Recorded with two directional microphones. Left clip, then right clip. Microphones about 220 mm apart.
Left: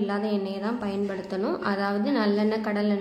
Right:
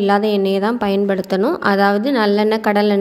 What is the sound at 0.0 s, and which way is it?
A woman's voice, 40° right (ahead or behind).